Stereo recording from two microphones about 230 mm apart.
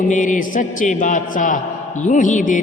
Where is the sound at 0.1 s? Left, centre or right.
Left.